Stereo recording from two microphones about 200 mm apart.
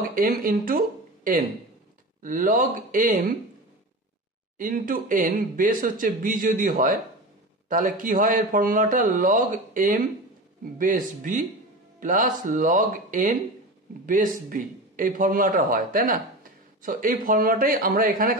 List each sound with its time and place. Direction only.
0.0 s speech: 45° right (ahead or behind)
2.2 s speech: 45° right (ahead or behind)
4.6 s speech: 45° right (ahead or behind)